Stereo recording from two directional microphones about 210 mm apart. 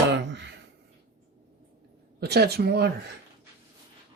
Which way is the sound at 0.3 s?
55° right (ahead or behind).